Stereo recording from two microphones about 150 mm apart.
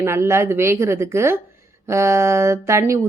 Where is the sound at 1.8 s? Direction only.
20° right (ahead or behind).